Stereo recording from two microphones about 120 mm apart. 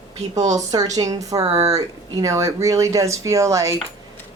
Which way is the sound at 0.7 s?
30° right (ahead or behind).